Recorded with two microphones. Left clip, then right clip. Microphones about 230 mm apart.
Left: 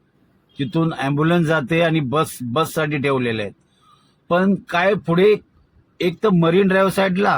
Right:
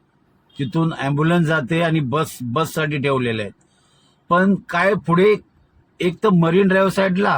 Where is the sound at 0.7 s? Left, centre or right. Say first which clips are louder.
Left 1 dB; right.